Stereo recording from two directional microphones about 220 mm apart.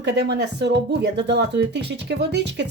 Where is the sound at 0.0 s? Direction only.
50° right (ahead or behind).